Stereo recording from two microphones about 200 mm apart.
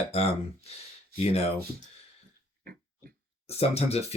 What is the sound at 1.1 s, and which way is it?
Speech, 30° left (ahead or behind).